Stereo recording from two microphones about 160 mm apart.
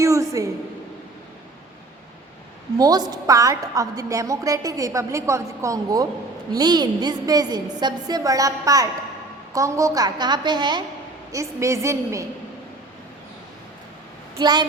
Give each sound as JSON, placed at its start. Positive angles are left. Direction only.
{"t": 0.0, "sound": "a sound", "side_deg": -20}
{"t": 2.7, "sound": "a woman's voice", "side_deg": -25}
{"t": 14.3, "sound": "a woman's voice", "side_deg": -25}